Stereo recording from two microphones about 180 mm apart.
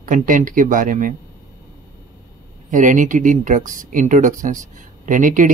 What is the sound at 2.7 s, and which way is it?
Speech, 45° right (ahead or behind).